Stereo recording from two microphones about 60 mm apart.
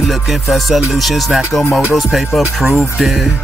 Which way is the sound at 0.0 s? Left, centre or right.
Centre.